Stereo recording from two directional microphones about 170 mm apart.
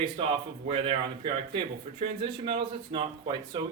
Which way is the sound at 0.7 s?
35° right (ahead or behind).